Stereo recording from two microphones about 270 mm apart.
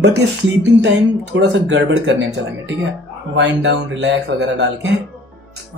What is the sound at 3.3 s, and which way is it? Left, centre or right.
Speech, right.